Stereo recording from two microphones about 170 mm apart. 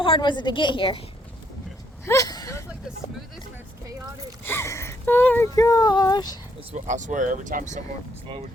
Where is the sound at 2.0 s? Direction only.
20° left (ahead or behind).